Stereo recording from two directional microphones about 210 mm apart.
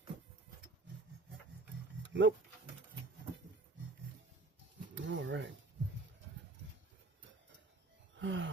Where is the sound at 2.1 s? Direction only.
60° right (ahead or behind).